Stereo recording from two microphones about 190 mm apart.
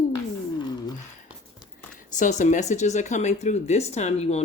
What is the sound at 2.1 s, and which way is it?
Speech, 40° left (ahead or behind).